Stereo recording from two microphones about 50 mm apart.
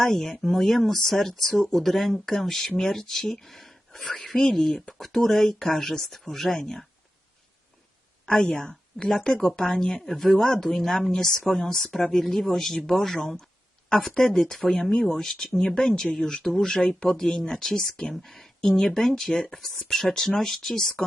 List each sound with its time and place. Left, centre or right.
0.0 s speech: centre
8.3 s speech: centre
16.7 s speech: left